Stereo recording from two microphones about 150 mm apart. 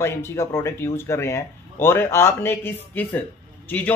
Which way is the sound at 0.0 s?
15° left (ahead or behind).